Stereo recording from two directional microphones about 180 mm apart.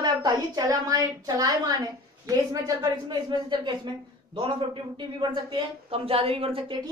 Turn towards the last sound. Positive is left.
turn(degrees=-30)  # may be behind; listen again after turning